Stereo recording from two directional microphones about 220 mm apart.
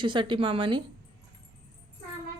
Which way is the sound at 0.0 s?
20° right (ahead or behind).